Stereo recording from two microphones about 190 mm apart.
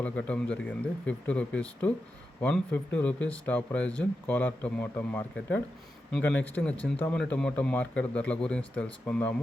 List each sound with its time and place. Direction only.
0.0 s a man's voice: 5° left (ahead or behind)